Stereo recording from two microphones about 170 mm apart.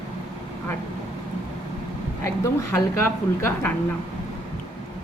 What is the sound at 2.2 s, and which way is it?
A woman's voice, 15° left (ahead or behind).